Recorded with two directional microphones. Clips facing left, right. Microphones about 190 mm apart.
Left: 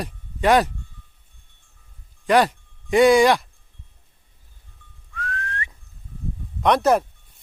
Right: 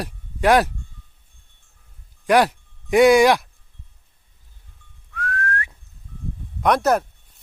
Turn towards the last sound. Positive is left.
turn(degrees=-5)  # may be behind; listen again after turning